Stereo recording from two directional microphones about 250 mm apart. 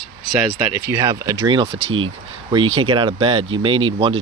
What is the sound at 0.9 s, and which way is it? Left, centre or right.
Speech, centre.